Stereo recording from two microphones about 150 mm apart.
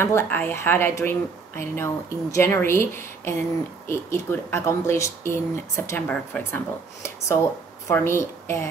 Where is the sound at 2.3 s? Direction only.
15° left (ahead or behind).